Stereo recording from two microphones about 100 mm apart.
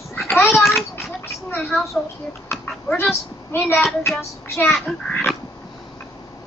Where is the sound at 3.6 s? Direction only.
20° left (ahead or behind).